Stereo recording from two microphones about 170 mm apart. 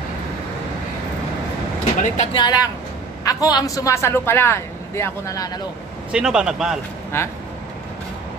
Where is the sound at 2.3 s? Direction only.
25° left (ahead or behind).